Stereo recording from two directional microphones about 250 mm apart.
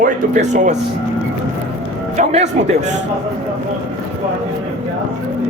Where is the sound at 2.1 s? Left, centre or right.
Right.